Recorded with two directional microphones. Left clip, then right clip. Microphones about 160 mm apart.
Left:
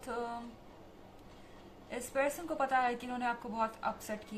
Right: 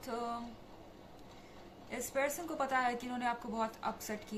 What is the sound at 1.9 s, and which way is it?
A woman's voice, 15° left (ahead or behind).